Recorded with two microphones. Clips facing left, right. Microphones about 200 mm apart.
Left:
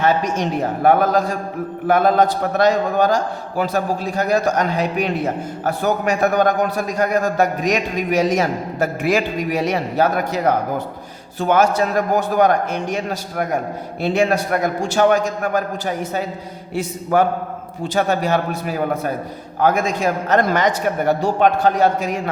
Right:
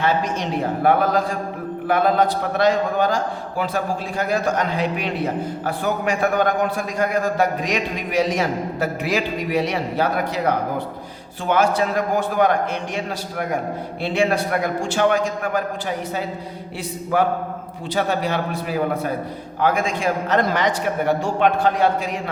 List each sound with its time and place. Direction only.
0.0 s a man's voice: 45° left (ahead or behind)
16.7 s a man's voice: 45° left (ahead or behind)
19.6 s a man's voice: 45° left (ahead or behind)